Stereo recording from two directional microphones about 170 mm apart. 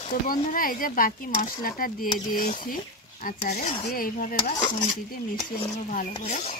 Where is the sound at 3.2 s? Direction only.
60° left (ahead or behind).